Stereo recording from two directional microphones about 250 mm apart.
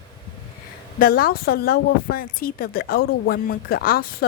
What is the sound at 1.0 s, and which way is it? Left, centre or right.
A woman's voice, left.